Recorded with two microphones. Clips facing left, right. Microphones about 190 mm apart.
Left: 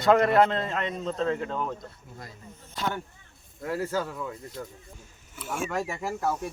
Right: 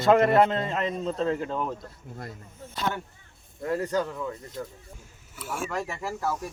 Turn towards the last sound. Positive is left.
turn(degrees=20)  # may be behind; listen again after turning